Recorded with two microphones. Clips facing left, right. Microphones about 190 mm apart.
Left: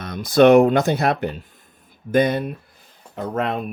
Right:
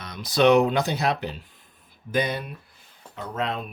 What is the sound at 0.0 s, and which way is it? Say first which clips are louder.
Speech: left 6 dB; 50° left (ahead or behind).